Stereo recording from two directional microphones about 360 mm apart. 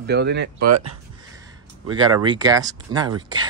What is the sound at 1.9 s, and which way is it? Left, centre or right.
Speech, centre.